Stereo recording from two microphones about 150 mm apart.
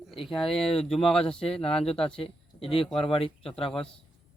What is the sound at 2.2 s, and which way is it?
Speech, 40° left (ahead or behind).